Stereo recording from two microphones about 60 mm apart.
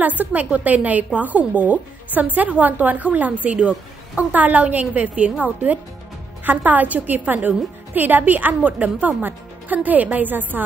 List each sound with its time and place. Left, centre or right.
0.2 s a woman's voice: right